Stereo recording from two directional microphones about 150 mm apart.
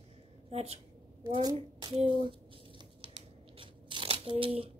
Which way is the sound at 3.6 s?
35° right (ahead or behind).